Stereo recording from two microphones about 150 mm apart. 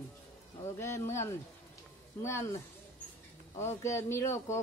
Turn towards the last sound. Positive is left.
turn(degrees=20)  # may be behind; listen again after turning